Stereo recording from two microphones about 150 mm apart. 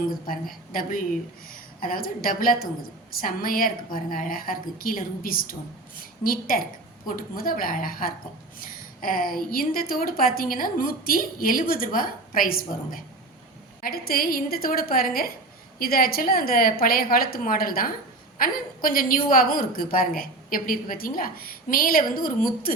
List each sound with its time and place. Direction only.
0.7 s a woman's voice: 70° left (ahead or behind)